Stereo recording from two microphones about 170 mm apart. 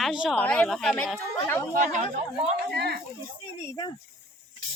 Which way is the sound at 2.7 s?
70° right (ahead or behind).